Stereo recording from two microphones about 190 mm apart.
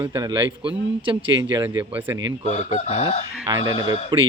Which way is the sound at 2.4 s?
35° left (ahead or behind).